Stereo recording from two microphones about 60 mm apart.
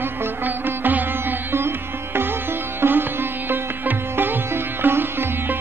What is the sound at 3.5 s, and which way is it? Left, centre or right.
Sitar, right.